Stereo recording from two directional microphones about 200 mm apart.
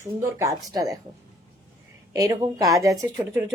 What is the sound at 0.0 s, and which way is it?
Speech, 15° right (ahead or behind).